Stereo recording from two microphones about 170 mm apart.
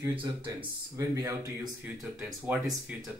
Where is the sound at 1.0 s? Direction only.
20° right (ahead or behind).